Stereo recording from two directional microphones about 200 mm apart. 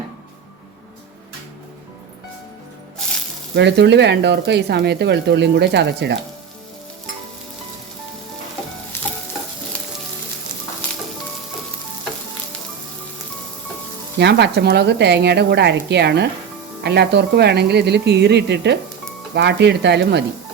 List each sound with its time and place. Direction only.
3.5 s speech: 60° right (ahead or behind)
14.2 s speech: 60° right (ahead or behind)